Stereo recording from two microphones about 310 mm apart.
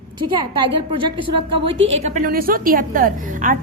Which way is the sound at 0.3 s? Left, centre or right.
Centre.